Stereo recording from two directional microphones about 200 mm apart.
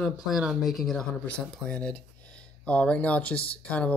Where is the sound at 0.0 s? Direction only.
Centre (ahead or behind).